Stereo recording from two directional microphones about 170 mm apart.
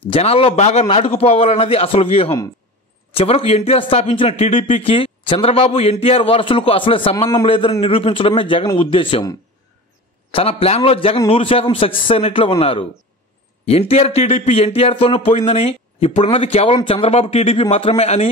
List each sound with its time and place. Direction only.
0.0 s speech: 35° left (ahead or behind)
10.3 s speech: 35° left (ahead or behind)